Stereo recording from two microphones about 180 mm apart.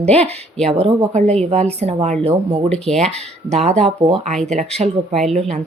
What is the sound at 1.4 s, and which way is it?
Speech, 35° right (ahead or behind).